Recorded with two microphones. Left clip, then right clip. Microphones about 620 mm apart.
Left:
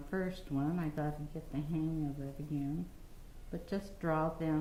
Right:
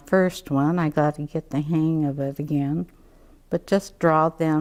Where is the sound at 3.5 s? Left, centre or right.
Right.